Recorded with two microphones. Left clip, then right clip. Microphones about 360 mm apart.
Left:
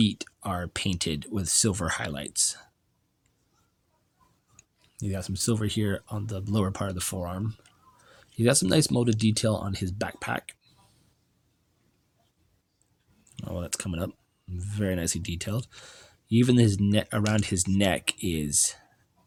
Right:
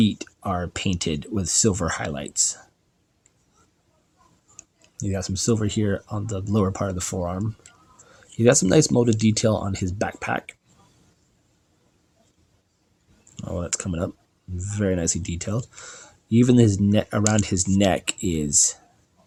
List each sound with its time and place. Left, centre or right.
0.0 s speech: left
4.9 s speech: left
13.3 s speech: left